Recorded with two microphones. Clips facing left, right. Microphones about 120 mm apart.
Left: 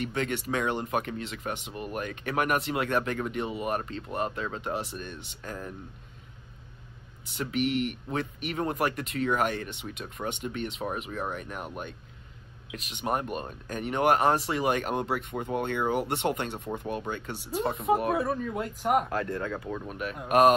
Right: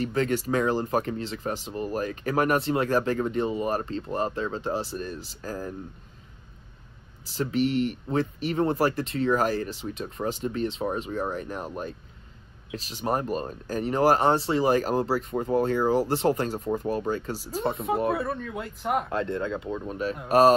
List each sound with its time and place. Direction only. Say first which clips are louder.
0.0 s speech: right 5 dB; 35° right (ahead or behind)
7.2 s speech: right 4 dB; 35° right (ahead or behind)
12.7 s speech: right 3 dB; 35° right (ahead or behind)
17.6 s speech: right 1 dB; centre (ahead or behind)
19.0 s speech: right 3 dB; 25° right (ahead or behind)